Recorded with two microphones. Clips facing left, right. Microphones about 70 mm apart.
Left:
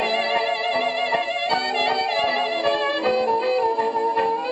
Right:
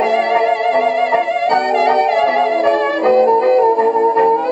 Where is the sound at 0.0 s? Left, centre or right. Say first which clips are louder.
Right 8 dB; centre.